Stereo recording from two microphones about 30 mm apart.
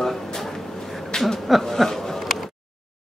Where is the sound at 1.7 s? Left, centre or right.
Centre.